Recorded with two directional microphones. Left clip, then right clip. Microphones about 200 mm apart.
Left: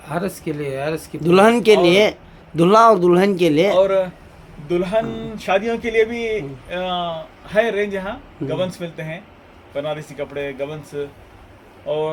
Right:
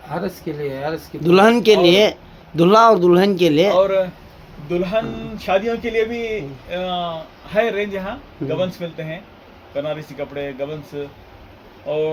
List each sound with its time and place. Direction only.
0.1 s speech: 55° left (ahead or behind)
1.2 s a man's voice: centre (ahead or behind)